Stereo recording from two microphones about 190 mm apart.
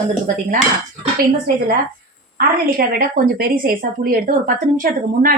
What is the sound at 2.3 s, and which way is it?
Speech, 50° right (ahead or behind).